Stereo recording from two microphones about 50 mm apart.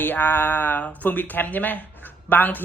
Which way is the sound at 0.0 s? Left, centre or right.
Left.